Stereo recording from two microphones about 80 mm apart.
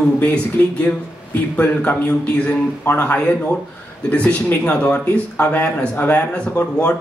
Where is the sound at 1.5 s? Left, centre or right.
Left.